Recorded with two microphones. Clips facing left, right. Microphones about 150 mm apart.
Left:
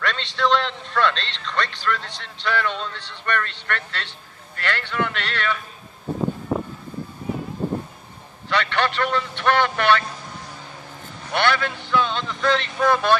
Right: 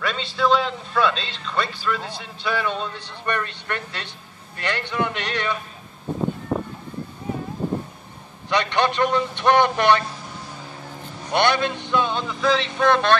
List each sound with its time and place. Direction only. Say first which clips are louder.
0.0 s a man's voice: right 1 dB; 5° right (ahead or behind)
8.5 s a man's voice: right 2 dB; 15° right (ahead or behind)
11.2 s a man's voice: right 2 dB; 20° right (ahead or behind); by 13.2 s 5° left (ahead or behind)